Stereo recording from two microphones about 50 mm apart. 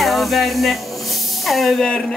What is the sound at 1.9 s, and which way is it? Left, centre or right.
Speech, left.